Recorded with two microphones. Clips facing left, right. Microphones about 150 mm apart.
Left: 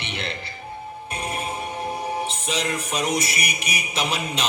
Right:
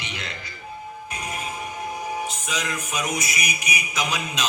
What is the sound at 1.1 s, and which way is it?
Music, 30° left (ahead or behind).